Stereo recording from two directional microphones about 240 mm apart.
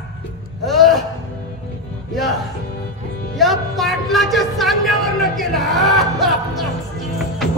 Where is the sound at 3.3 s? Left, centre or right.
Centre.